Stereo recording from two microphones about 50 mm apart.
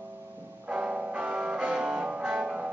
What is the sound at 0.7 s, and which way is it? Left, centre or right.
Music, right.